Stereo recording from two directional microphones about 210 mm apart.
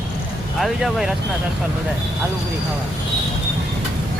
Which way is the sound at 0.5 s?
Centre (ahead or behind).